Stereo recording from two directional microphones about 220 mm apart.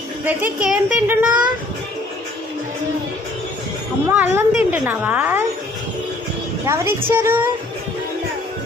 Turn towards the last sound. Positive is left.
turn(degrees=-10)  # may be behind; listen again after turning